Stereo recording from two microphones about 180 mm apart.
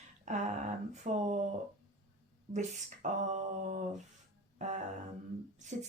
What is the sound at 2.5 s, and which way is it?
Speech, 40° right (ahead or behind).